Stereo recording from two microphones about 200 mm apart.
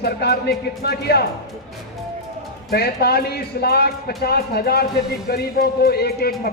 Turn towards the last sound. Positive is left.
turn(degrees=50)  # may be behind; listen again after turning